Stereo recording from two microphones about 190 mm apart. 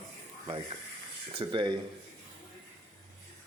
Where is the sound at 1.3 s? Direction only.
25° right (ahead or behind).